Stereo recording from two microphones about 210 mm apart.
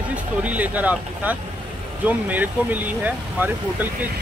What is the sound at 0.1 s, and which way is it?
Speech, 5° right (ahead or behind).